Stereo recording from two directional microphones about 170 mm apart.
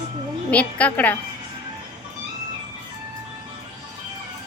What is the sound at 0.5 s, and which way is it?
Speech, 10° left (ahead or behind).